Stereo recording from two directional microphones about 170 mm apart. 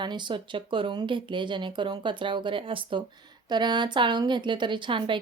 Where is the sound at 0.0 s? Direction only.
25° right (ahead or behind).